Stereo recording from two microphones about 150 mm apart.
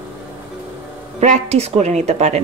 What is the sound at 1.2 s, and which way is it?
A woman's voice, 45° right (ahead or behind).